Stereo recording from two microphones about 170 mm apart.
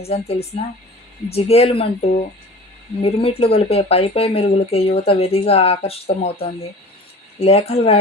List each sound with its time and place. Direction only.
0.0 s speech: 35° left (ahead or behind)